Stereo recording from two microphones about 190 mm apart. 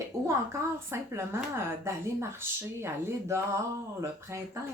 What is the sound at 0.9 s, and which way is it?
Speech, 15° right (ahead or behind).